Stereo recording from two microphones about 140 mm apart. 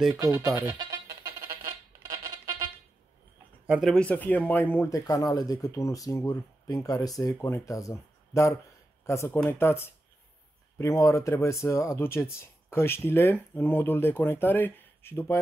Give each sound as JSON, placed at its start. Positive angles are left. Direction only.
{"t": 0.2, "sound": "music", "side_deg": -25}
{"t": 3.6, "sound": "speech", "side_deg": -10}
{"t": 3.9, "sound": "speech", "side_deg": 10}